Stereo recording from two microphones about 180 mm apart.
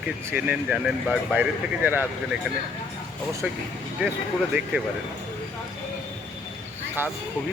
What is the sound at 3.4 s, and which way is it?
Speech, 5° right (ahead or behind).